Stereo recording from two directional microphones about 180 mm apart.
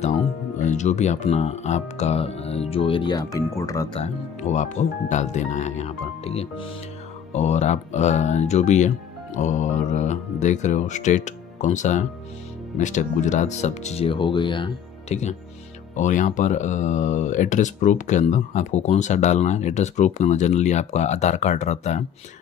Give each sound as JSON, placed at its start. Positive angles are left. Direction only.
{"t": 0.0, "sound": "speech", "side_deg": 40}
{"t": 4.0, "sound": "speech", "side_deg": 40}
{"t": 16.0, "sound": "speech", "side_deg": 45}